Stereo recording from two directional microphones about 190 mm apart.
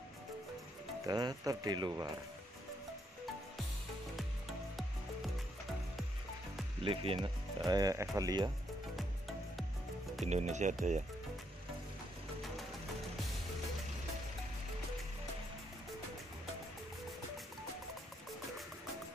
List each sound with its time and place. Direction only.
1.0 s speech: 20° right (ahead or behind)
4.2 s music: centre (ahead or behind)
6.8 s speech: 30° right (ahead or behind)
10.2 s speech: 35° right (ahead or behind)